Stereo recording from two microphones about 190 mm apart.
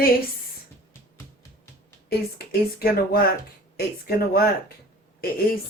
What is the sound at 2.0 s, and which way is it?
Speech, 55° left (ahead or behind).